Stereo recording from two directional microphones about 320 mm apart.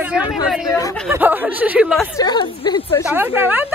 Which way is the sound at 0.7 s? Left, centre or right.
Centre.